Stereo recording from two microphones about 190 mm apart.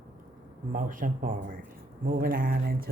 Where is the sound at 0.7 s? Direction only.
45° right (ahead or behind).